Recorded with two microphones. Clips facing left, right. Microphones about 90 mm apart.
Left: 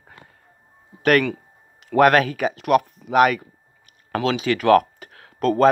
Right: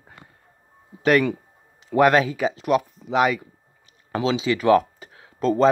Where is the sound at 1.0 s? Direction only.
55° left (ahead or behind).